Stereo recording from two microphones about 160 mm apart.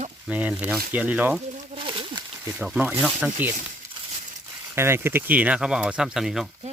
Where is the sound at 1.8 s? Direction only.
30° right (ahead or behind).